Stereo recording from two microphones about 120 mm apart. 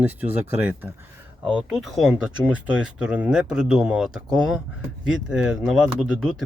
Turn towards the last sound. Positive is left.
turn(degrees=-5)  # may be behind; listen again after turning